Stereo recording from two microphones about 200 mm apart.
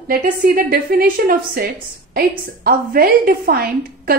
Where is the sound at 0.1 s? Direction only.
45° right (ahead or behind).